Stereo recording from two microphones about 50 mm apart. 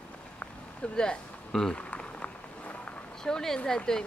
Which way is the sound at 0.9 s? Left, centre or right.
Centre.